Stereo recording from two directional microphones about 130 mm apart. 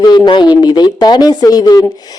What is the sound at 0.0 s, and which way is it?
Speech, 35° left (ahead or behind).